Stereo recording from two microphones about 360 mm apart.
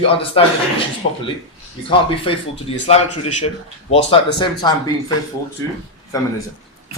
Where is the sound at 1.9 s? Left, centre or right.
Centre.